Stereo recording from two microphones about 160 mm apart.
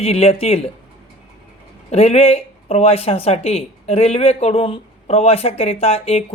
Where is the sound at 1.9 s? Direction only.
40° left (ahead or behind).